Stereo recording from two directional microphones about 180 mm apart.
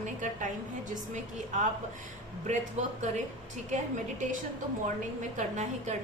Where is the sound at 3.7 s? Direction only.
45° right (ahead or behind).